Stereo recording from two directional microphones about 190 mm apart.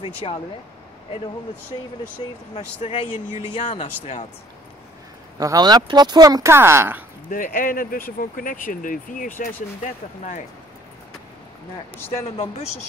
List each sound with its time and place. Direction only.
0.0 s speech: 30° left (ahead or behind)
1.7 s speech: 25° left (ahead or behind)
2.8 s speech: 40° left (ahead or behind)
5.4 s speech: 20° right (ahead or behind)
7.2 s speech: 45° left (ahead or behind)
12.0 s speech: 15° left (ahead or behind)